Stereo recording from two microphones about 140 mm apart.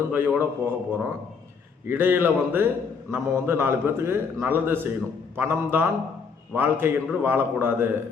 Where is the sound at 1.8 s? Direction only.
15° right (ahead or behind).